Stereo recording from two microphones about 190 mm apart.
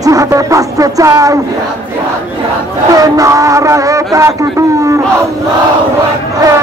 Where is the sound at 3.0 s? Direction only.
15° right (ahead or behind).